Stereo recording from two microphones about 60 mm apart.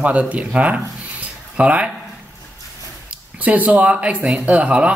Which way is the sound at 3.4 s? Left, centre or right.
Right.